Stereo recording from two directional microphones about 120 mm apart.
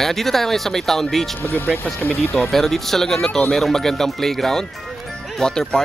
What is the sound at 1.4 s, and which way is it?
Speech, 15° left (ahead or behind).